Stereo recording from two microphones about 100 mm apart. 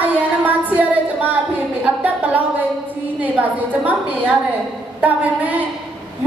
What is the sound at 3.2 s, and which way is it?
Speech, 15° right (ahead or behind).